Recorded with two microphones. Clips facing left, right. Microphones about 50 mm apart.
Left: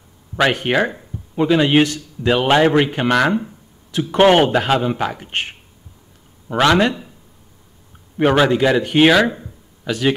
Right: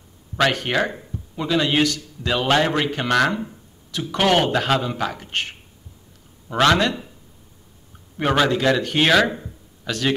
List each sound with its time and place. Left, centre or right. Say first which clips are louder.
0.4 s a man's voice: left 3 dB; left
3.9 s a man's voice: left 6 dB; left
6.5 s speech: left 2 dB; centre
8.2 s speech: left 5 dB; centre